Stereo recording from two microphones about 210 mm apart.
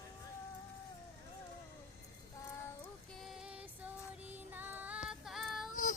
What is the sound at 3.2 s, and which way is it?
Music, centre (ahead or behind).